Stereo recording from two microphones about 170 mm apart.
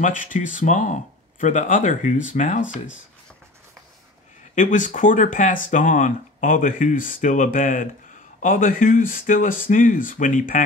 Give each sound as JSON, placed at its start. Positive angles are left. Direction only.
{"t": 0.0, "sound": "speech", "side_deg": 50}
{"t": 4.6, "sound": "speech", "side_deg": 45}